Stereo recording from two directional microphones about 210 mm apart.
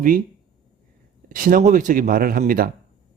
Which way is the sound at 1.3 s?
40° right (ahead or behind).